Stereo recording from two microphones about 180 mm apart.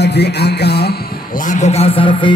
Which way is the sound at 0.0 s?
70° left (ahead or behind).